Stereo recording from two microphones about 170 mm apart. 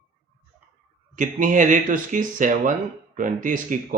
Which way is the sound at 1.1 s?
50° right (ahead or behind).